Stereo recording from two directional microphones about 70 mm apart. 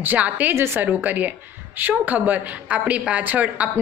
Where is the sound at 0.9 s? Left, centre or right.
Right.